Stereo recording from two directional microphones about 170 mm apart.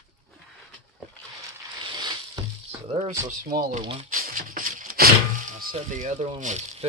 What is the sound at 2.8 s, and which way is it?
Speech, 40° right (ahead or behind).